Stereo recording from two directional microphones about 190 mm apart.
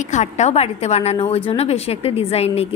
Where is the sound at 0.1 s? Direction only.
35° left (ahead or behind).